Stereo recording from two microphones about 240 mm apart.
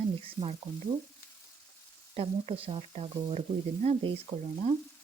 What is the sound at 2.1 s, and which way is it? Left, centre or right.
Speech, right.